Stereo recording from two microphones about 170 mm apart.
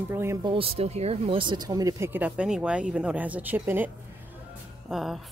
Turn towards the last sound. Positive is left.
turn(degrees=0)  # may be behind; listen again after turning